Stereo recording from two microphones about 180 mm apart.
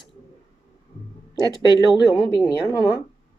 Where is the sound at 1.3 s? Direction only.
25° left (ahead or behind).